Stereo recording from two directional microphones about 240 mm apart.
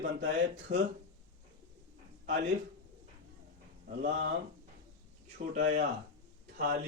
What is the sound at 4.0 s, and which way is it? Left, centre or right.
Speech, right.